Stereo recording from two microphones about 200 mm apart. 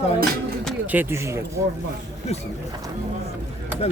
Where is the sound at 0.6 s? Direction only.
5° right (ahead or behind).